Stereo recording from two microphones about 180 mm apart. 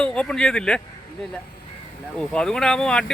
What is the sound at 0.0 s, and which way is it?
Speech, 5° left (ahead or behind).